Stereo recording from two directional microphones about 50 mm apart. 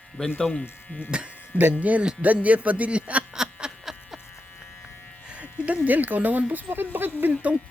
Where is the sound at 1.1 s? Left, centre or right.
Right.